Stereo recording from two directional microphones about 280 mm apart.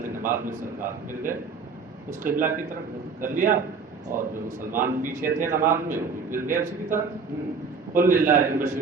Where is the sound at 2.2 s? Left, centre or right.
Right.